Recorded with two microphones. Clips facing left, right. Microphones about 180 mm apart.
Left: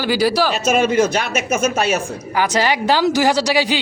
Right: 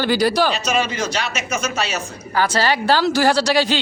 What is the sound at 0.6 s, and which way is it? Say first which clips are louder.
A man's voice: left 6 dB; 50° left (ahead or behind).